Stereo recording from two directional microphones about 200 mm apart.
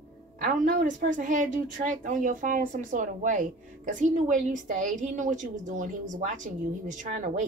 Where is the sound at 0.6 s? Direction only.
40° right (ahead or behind).